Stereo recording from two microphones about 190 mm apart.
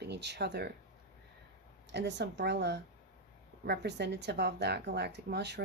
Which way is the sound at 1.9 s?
65° right (ahead or behind).